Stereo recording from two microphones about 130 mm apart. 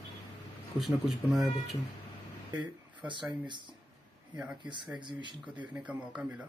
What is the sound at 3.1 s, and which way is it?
Speech, 35° right (ahead or behind).